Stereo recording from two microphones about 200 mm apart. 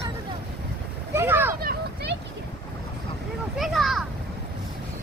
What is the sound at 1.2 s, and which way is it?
Speech, 10° right (ahead or behind).